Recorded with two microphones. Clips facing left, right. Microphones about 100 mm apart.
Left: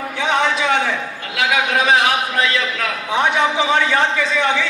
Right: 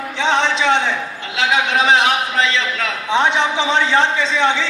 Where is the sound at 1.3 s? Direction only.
25° right (ahead or behind).